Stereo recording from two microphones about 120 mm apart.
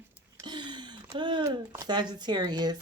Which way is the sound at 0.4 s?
40° right (ahead or behind).